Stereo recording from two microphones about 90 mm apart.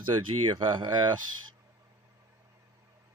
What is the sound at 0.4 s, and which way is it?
Speech, 65° right (ahead or behind).